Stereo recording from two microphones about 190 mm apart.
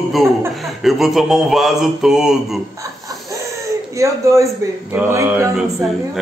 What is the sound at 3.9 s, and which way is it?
A man's voice, 15° right (ahead or behind).